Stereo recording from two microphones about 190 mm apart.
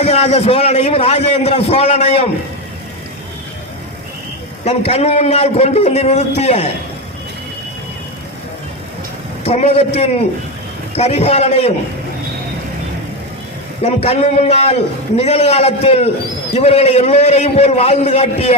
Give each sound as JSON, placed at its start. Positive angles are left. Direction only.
{"t": 0.0, "sound": "a man's voice", "side_deg": 35}
{"t": 4.6, "sound": "a man's voice", "side_deg": 35}
{"t": 9.4, "sound": "a man's voice", "side_deg": 35}
{"t": 13.8, "sound": "a man's voice", "side_deg": 35}